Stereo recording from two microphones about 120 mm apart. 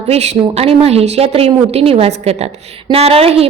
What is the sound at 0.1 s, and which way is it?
A woman's voice, 60° right (ahead or behind).